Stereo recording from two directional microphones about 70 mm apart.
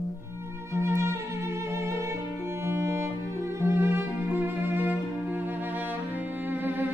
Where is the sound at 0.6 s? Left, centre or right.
Right.